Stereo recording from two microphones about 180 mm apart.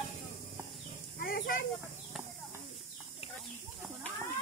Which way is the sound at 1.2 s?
50° left (ahead or behind).